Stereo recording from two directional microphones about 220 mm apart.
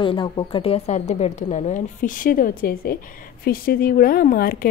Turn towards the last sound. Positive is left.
turn(degrees=40)  # may be behind; listen again after turning